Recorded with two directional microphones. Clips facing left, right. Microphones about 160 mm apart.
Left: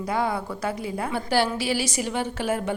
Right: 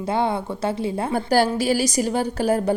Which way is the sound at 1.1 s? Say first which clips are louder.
Right 4 dB; 40° right (ahead or behind).